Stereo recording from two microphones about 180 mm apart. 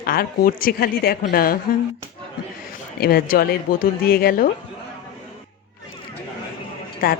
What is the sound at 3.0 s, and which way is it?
Speech, 55° left (ahead or behind).